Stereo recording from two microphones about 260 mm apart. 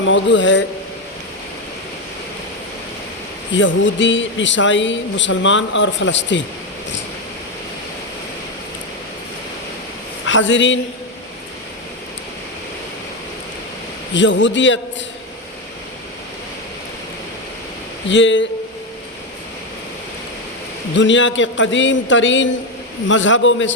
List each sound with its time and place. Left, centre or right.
0.0 s speech: left
3.5 s speech: left
10.2 s speech: left
14.1 s speech: left
18.1 s speech: left
20.9 s speech: left